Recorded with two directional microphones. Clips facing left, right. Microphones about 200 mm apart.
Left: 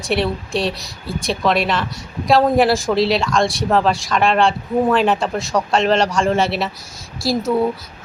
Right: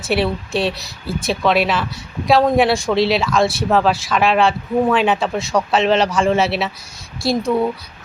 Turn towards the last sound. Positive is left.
turn(degrees=0)  # may be behind; listen again after turning